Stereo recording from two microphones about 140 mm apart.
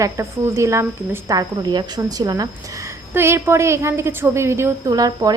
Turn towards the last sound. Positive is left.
turn(degrees=-25)  # may be behind; listen again after turning